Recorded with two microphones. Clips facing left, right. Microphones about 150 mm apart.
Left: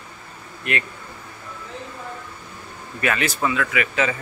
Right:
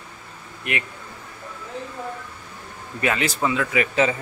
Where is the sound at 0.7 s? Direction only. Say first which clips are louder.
Left 2 dB; 15° right (ahead or behind).